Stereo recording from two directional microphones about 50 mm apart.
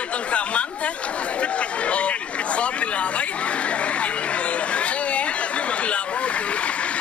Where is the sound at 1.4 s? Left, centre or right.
Left.